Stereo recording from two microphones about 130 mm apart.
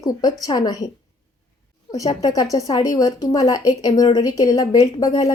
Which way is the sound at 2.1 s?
30° left (ahead or behind).